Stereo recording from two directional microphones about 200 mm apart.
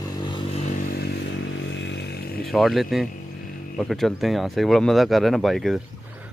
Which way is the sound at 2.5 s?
Centre (ahead or behind).